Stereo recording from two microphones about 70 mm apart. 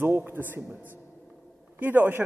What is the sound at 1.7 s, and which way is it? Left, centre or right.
Speech, right.